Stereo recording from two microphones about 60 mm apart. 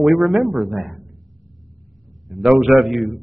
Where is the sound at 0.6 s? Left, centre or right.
Right.